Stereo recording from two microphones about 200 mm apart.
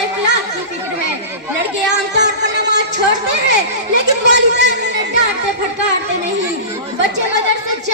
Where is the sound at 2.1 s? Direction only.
60° right (ahead or behind).